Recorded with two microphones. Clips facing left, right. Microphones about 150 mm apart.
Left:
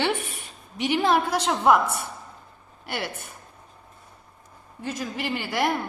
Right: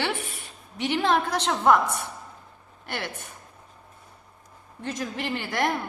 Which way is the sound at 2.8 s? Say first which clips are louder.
Left 2 dB; 10° left (ahead or behind).